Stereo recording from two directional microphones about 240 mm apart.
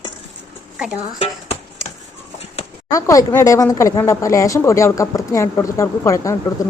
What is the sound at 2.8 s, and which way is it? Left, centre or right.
Speech, centre.